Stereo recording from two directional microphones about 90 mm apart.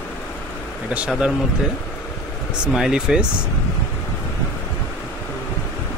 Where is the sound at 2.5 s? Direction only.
10° right (ahead or behind).